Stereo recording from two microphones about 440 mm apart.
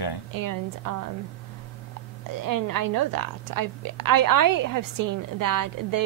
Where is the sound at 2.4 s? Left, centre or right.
Right.